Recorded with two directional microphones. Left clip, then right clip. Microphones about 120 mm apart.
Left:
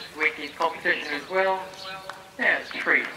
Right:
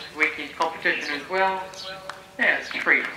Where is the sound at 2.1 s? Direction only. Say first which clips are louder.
Right 1 dB; 10° right (ahead or behind).